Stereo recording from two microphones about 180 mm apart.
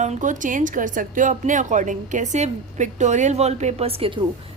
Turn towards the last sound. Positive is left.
turn(degrees=-30)  # may be behind; listen again after turning